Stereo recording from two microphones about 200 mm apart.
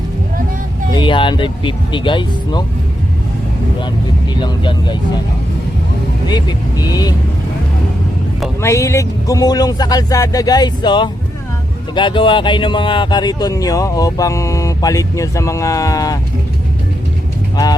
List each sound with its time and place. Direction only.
0.9 s speech: 25° left (ahead or behind)
4.4 s speech: 20° left (ahead or behind)
6.2 s speech: 20° left (ahead or behind)
8.6 s speech: 15° left (ahead or behind)